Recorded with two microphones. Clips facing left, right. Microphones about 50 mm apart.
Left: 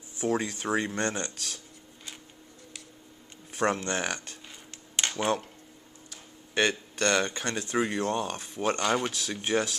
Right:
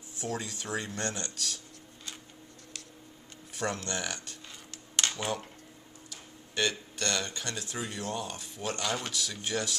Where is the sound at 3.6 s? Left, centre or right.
Left.